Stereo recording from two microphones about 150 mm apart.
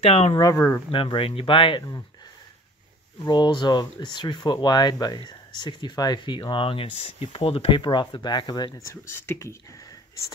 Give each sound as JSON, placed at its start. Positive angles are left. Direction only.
{"t": 0.0, "sound": "speech", "side_deg": 40}
{"t": 0.6, "sound": "speech", "side_deg": 10}
{"t": 0.9, "sound": "speech", "side_deg": 35}
{"t": 3.3, "sound": "speech", "side_deg": 30}